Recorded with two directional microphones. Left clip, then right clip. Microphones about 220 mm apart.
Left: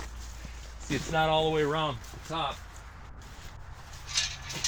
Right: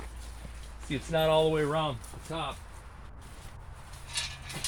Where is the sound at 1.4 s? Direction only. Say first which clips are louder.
Even; 45° right (ahead or behind).